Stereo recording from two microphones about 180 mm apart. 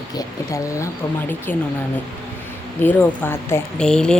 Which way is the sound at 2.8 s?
10° left (ahead or behind).